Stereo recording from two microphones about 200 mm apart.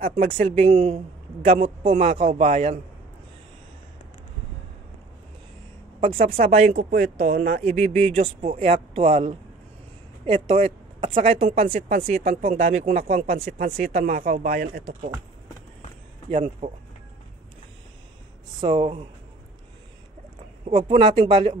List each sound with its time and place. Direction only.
0.0 s speech: 45° right (ahead or behind)
0.5 s a man's voice: 30° right (ahead or behind)
2.0 s a man's voice: 30° right (ahead or behind)
6.0 s a man's voice: 30° right (ahead or behind)
6.9 s speech: 50° right (ahead or behind)
7.6 s a man's voice: 35° right (ahead or behind)
12.6 s speech: 45° right (ahead or behind)
13.0 s a man's voice: 30° right (ahead or behind)
13.7 s speech: 50° right (ahead or behind)
16.3 s a man's voice: 30° right (ahead or behind)
18.6 s speech: 25° right (ahead or behind)
20.6 s speech: 25° right (ahead or behind)